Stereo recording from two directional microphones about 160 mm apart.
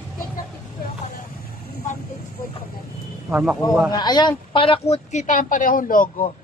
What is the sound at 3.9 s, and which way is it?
A woman's voice, 25° left (ahead or behind).